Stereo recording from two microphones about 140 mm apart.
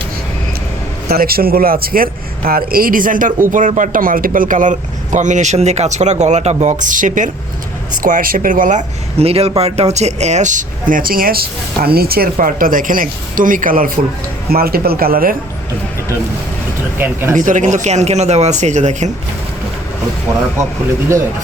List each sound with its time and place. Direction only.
1.0 s a man's voice: 90° right; by 7.3 s 70° right (ahead or behind)
8.0 s speech: 80° right
9.1 s speech: 45° right (ahead or behind); by 13.9 s 80° right
14.5 s a man's voice: 90° right
17.0 s speech: 15° right (ahead or behind)
17.3 s a man's voice: 65° right (ahead or behind)